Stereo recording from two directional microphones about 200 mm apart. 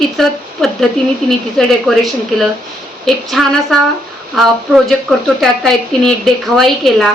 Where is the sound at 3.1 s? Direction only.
Centre (ahead or behind).